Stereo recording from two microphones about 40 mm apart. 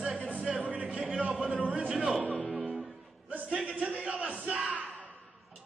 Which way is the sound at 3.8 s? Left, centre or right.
Right.